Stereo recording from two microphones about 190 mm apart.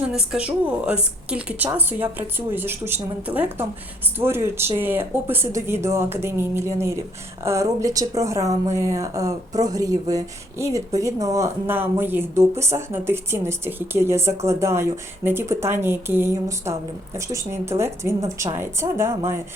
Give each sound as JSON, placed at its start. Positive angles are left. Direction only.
{"t": 0.1, "sound": "speech", "side_deg": -5}